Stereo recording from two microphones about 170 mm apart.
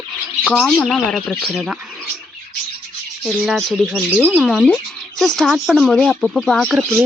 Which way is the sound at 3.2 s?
Centre (ahead or behind).